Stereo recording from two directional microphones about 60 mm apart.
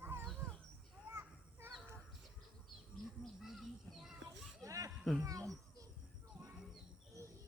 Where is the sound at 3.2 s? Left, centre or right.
Centre.